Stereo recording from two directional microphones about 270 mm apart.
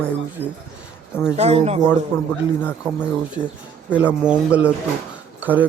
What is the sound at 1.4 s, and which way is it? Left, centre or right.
Speech, right.